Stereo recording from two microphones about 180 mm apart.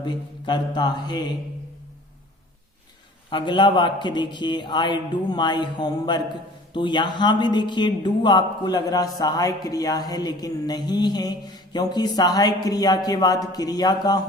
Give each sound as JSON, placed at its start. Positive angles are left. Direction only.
{"t": 0.0, "sound": "a man's voice", "side_deg": 25}
{"t": 3.2, "sound": "a man's voice", "side_deg": 25}